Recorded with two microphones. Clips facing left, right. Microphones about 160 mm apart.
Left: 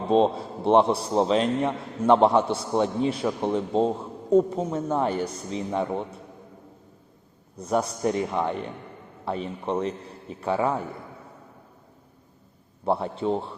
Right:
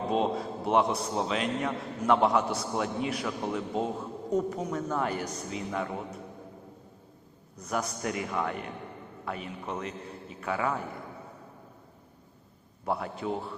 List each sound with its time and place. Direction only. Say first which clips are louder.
0.1 s a man's voice: left 9 dB; 30° left (ahead or behind)
7.5 s a man's voice: left 7 dB; 30° left (ahead or behind)
12.8 s a man's voice: left 7 dB; 30° left (ahead or behind)